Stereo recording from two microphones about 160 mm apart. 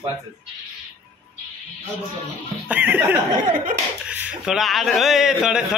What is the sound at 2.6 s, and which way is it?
Speech, 10° right (ahead or behind).